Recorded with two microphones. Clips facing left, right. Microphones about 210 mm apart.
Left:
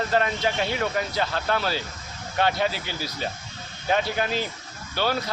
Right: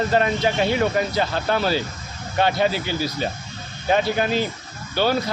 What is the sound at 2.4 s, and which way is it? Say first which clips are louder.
Speech: right 4 dB; centre (ahead or behind).